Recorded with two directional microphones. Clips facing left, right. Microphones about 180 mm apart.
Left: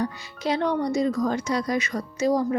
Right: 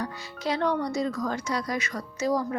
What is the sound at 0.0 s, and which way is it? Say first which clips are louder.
Speech: left 4 dB; 20° left (ahead or behind).